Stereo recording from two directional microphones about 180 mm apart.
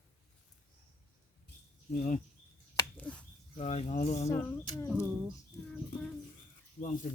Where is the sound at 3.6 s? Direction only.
35° left (ahead or behind).